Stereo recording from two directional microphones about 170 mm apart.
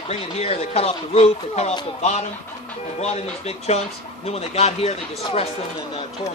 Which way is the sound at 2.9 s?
40° left (ahead or behind).